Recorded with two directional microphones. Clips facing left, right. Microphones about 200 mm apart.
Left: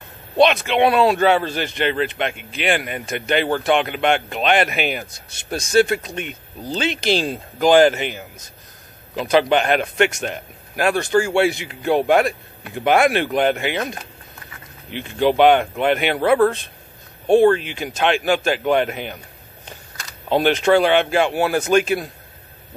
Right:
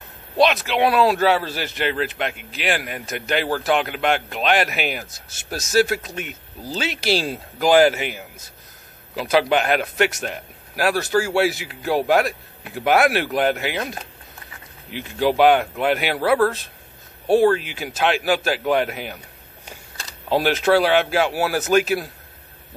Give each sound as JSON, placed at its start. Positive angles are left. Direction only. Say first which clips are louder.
{"t": 0.4, "sound": "a man's voice", "louder": "left 3 dB", "side_deg": 0}
{"t": 20.2, "sound": "a man's voice", "louder": "left 2 dB", "side_deg": -5}